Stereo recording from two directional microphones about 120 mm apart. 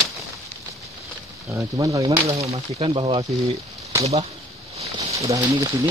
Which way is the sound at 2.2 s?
55° right (ahead or behind).